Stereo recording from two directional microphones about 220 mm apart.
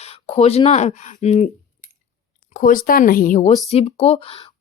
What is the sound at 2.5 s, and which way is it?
Speech, 35° left (ahead or behind).